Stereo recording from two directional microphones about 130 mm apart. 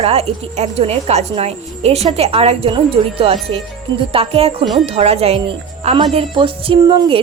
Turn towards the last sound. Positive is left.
turn(degrees=-35)  # may be behind; listen again after turning